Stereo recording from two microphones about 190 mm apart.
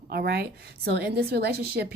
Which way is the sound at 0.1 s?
55° right (ahead or behind).